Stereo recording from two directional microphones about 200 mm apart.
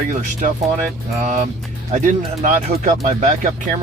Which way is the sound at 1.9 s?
40° right (ahead or behind).